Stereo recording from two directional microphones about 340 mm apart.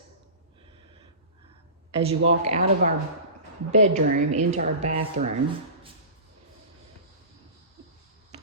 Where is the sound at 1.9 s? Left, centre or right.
Centre.